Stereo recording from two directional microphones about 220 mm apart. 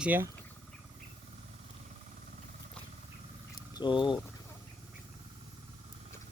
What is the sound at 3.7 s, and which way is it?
Speech, 20° left (ahead or behind).